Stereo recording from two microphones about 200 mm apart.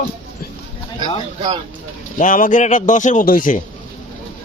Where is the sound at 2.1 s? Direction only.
40° left (ahead or behind).